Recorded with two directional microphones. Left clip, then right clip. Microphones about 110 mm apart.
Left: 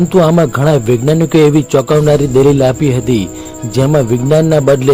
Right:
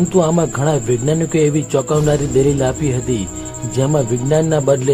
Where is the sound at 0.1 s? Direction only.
50° left (ahead or behind).